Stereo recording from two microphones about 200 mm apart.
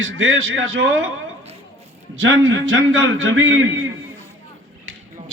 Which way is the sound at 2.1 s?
75° right (ahead or behind).